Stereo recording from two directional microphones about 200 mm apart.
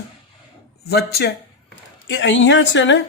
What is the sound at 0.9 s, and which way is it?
Speech, 50° left (ahead or behind).